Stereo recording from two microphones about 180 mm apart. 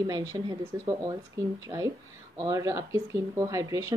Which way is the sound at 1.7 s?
20° right (ahead or behind).